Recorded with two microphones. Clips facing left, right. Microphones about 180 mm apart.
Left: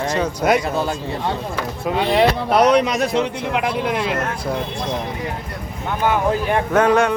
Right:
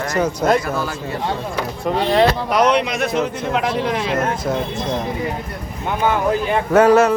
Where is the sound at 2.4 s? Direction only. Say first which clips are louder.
Left 2 dB; 35° left (ahead or behind).